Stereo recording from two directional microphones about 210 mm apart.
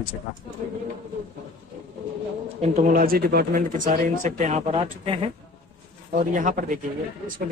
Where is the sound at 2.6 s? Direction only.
35° right (ahead or behind).